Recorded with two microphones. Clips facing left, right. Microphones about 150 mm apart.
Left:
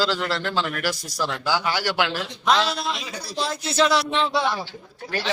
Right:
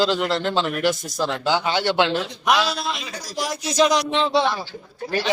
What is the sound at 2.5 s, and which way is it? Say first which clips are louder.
Speech: even; 10° right (ahead or behind).